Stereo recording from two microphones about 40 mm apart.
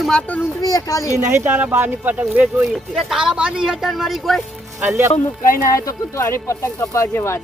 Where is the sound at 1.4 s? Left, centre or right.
Right.